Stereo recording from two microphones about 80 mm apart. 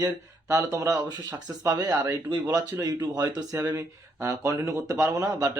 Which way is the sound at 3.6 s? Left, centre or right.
Right.